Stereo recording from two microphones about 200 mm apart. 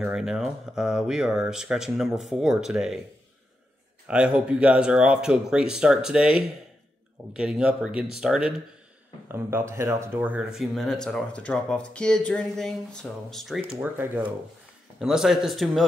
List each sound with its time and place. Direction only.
0.0 s speech: 5° right (ahead or behind)
4.1 s speech: 5° right (ahead or behind)
13.7 s speech: 10° right (ahead or behind)